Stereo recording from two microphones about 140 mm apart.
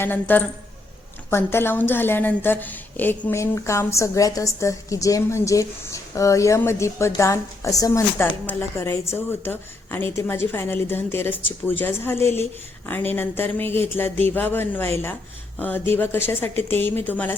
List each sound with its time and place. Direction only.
0.0 s a woman's voice: 15° left (ahead or behind)